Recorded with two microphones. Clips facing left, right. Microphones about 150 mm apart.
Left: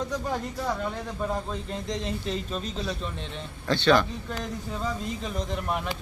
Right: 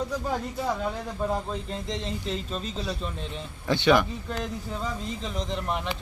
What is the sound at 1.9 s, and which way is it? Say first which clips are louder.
Speech: left 2 dB; centre (ahead or behind).